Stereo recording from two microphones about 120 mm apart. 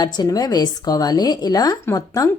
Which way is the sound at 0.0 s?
35° left (ahead or behind).